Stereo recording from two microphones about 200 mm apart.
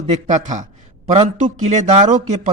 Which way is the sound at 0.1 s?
35° right (ahead or behind).